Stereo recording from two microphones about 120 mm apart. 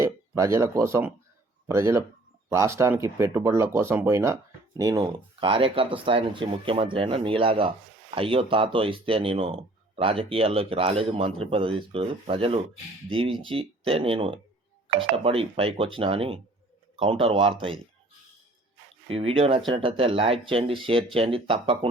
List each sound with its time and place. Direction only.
0.0 s speech: 25° right (ahead or behind)
4.8 s speech: 30° right (ahead or behind); by 17.7 s 50° right (ahead or behind)
19.0 s speech: 50° right (ahead or behind)